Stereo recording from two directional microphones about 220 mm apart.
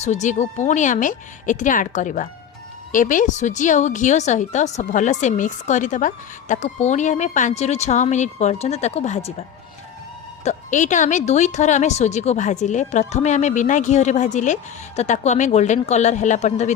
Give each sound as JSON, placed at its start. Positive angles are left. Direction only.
{"t": 0.0, "sound": "a woman's voice", "side_deg": 35}
{"t": 10.4, "sound": "a woman's voice", "side_deg": 35}